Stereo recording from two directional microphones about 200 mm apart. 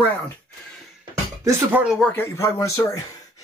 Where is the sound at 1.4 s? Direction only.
10° right (ahead or behind).